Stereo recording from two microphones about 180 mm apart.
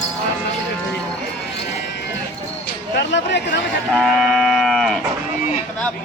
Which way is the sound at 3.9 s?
Centre (ahead or behind).